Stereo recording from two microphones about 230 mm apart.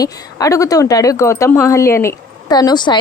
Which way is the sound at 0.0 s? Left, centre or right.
Centre.